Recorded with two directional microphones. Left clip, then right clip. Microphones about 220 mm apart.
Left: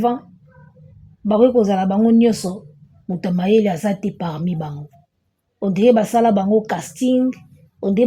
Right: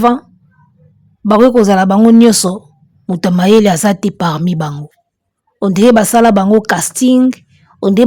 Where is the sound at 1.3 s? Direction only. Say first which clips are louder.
Right 6 dB; 45° right (ahead or behind).